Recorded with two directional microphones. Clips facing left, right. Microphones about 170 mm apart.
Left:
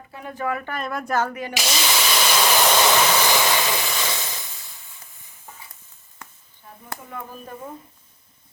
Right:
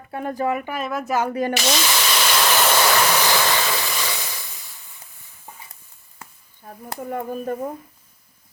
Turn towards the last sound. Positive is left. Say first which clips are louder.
# right 10 dB
turn(degrees=-50)  # may be behind; listen again after turning